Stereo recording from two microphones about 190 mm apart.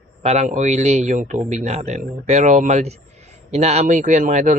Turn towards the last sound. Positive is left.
turn(degrees=-40)  # may be behind; listen again after turning